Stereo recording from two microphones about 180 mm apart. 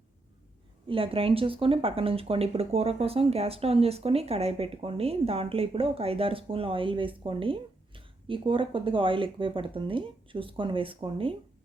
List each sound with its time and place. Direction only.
0.9 s speech: 30° right (ahead or behind)